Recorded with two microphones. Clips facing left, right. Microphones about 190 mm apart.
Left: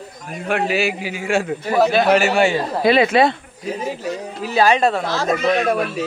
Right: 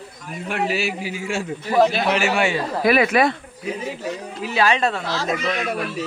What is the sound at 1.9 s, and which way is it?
Speech, 50° left (ahead or behind).